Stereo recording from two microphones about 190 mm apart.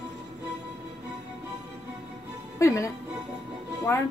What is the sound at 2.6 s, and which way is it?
Speech, 15° left (ahead or behind).